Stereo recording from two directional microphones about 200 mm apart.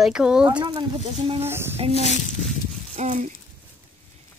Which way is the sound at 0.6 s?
20° right (ahead or behind).